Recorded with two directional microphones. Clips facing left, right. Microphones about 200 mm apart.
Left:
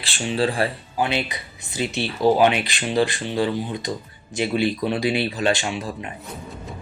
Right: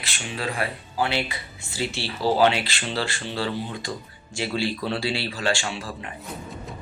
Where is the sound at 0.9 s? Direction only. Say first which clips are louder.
Even; 20° left (ahead or behind).